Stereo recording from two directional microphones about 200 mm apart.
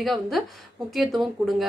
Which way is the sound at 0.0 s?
Centre (ahead or behind).